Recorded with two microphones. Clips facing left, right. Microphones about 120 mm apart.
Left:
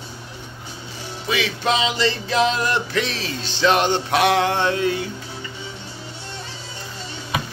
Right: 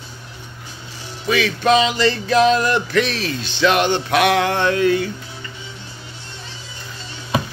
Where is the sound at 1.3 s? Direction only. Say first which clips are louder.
Right 6 dB; 20° left (ahead or behind).